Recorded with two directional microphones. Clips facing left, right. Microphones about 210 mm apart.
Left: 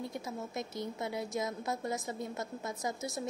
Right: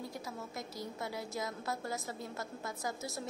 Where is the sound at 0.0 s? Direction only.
20° left (ahead or behind).